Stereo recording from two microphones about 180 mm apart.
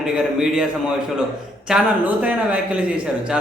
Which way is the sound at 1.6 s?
5° right (ahead or behind).